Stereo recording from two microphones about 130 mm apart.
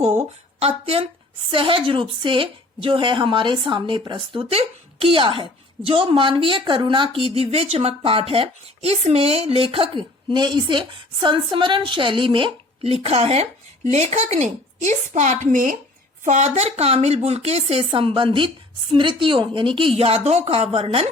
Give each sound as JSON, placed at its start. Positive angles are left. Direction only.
{"t": 0.2, "sound": "a woman's voice", "side_deg": -50}
{"t": 16.2, "sound": "a woman's voice", "side_deg": -65}